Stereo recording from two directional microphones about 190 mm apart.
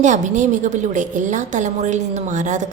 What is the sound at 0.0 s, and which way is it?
A woman's voice, 40° right (ahead or behind).